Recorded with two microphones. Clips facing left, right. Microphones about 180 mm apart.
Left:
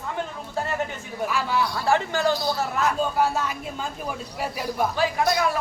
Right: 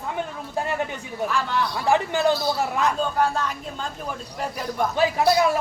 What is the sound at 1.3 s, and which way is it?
Speech, 10° left (ahead or behind).